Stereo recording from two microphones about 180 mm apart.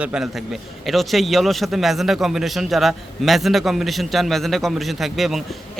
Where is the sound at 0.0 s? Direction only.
5° right (ahead or behind).